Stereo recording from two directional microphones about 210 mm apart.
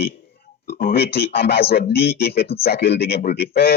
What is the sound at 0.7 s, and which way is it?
Speech, 45° left (ahead or behind).